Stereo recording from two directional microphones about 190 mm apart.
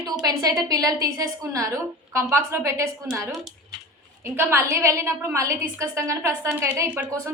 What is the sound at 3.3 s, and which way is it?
Speech, centre (ahead or behind).